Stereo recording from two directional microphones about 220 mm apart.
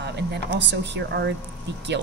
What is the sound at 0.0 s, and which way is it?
A woman's voice, 50° right (ahead or behind).